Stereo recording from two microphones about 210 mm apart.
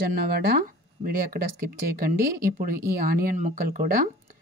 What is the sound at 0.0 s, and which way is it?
Speech, 45° right (ahead or behind).